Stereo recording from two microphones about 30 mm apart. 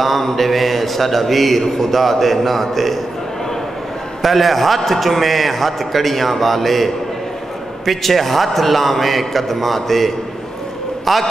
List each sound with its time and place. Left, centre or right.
0.0 s a man's voice: centre
4.2 s a man's voice: centre